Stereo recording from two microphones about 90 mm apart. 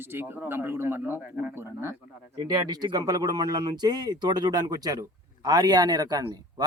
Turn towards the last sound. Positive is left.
turn(degrees=-45)  # may be behind; listen again after turning